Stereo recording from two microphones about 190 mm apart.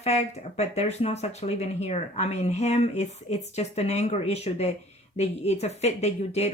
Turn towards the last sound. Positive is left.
turn(degrees=35)  # may be behind; listen again after turning